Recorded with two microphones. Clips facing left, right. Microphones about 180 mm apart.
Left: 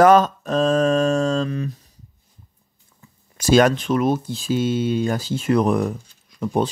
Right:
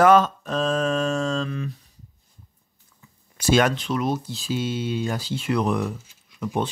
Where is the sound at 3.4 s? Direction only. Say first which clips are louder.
Left 5 dB; 40° left (ahead or behind).